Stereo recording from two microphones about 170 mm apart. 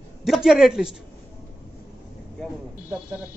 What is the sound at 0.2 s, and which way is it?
Speech, centre (ahead or behind).